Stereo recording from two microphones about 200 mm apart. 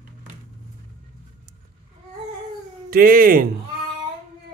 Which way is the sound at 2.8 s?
45° right (ahead or behind).